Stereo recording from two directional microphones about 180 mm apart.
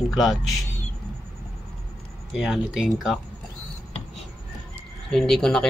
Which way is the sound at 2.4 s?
Centre (ahead or behind).